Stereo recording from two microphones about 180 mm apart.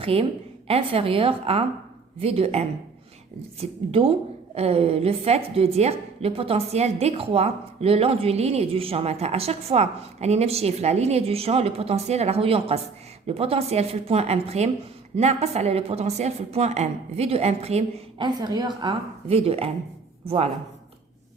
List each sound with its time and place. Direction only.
0.0 s a woman's voice: 30° right (ahead or behind)